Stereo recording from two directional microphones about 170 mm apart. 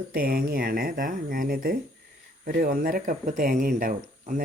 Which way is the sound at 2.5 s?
60° right (ahead or behind).